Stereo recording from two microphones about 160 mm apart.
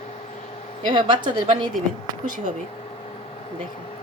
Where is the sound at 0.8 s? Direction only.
30° right (ahead or behind).